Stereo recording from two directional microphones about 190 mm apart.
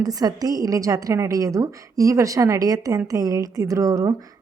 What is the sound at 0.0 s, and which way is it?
A woman's voice, 20° right (ahead or behind).